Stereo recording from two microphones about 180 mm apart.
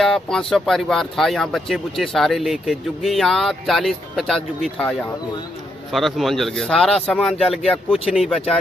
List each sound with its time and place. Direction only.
0.0 s speech: 5° left (ahead or behind)